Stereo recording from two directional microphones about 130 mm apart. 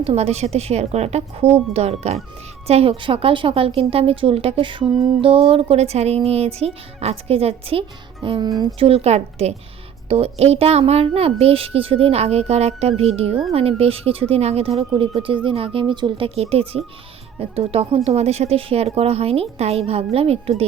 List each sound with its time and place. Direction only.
0.0 s a child's voice: 50° right (ahead or behind)